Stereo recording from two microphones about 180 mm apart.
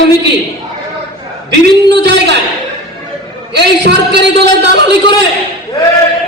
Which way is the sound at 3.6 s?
70° right (ahead or behind).